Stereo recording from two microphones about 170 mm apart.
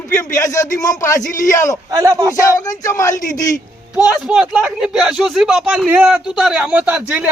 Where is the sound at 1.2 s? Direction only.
50° left (ahead or behind).